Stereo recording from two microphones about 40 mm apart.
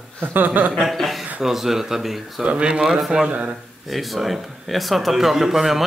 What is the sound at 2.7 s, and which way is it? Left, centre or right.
Speech, centre.